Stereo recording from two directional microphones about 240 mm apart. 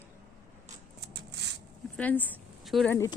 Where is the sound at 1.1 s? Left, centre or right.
Right.